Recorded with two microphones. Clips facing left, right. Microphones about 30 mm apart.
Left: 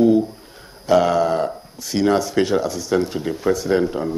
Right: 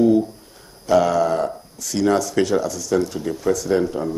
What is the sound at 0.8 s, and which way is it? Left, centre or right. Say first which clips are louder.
Speech: left 1 dB; left.